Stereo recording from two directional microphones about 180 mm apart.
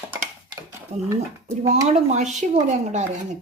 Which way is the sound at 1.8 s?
40° right (ahead or behind).